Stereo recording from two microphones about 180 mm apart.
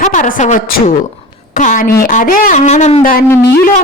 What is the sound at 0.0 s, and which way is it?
A woman's voice, 45° left (ahead or behind).